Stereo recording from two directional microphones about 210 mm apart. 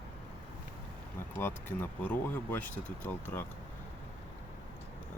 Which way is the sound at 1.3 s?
10° left (ahead or behind).